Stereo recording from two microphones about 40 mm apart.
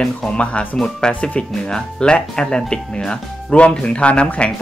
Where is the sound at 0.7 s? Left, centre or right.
Centre.